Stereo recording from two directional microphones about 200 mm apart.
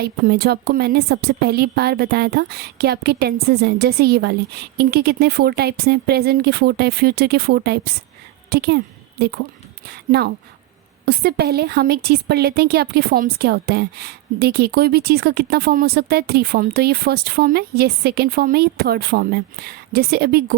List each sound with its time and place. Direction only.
0.0 s a woman's voice: 50° right (ahead or behind)